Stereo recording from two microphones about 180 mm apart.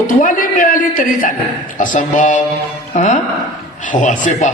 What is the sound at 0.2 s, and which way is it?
A man's voice, 50° left (ahead or behind).